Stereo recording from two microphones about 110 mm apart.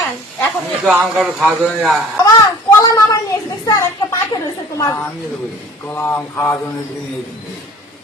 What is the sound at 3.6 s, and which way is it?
A woman's voice, 30° left (ahead or behind).